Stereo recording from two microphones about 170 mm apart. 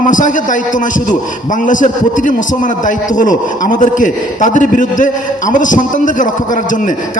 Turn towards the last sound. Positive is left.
turn(degrees=50)  # may be behind; listen again after turning